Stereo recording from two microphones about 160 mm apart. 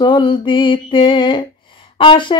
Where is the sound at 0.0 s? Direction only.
30° left (ahead or behind).